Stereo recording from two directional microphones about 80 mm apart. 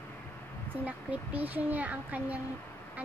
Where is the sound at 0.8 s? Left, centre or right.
Centre.